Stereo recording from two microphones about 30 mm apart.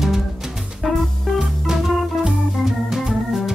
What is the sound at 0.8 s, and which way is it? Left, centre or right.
Music, centre.